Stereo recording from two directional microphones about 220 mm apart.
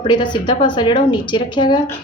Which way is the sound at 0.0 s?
20° left (ahead or behind).